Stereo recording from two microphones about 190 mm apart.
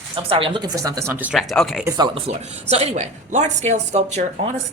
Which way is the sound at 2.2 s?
35° right (ahead or behind).